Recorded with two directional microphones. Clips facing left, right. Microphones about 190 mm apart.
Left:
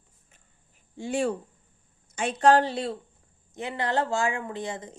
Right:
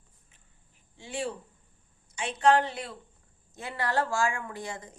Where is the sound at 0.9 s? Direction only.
45° left (ahead or behind); by 3.0 s 30° left (ahead or behind).